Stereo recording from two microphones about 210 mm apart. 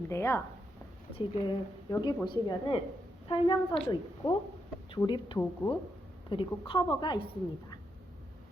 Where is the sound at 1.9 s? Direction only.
20° left (ahead or behind).